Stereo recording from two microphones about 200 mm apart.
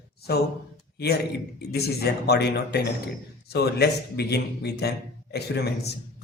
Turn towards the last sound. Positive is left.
turn(degrees=55)  # may be behind; listen again after turning